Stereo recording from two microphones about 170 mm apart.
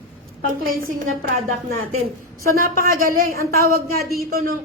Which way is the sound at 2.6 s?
55° right (ahead or behind).